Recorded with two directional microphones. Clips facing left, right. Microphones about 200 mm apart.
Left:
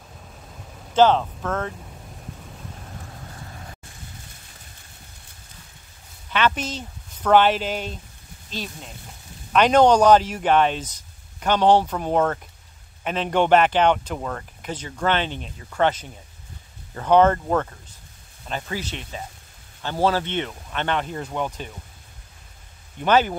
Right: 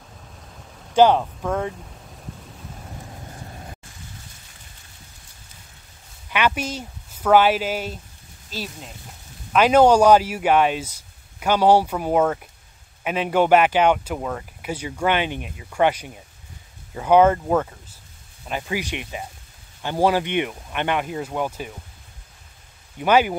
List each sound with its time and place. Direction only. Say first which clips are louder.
0.9 s speech: right 1 dB; 10° right (ahead or behind)
3.3 s vehicle: right 2 dB; 20° right (ahead or behind)
6.3 s speech: even; 10° right (ahead or behind)
22.9 s speech: right 1 dB; 10° right (ahead or behind)